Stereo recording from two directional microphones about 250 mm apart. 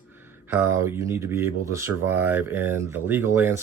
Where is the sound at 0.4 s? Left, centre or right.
Centre.